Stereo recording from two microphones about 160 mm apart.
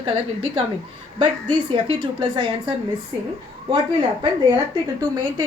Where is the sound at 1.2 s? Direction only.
30° right (ahead or behind).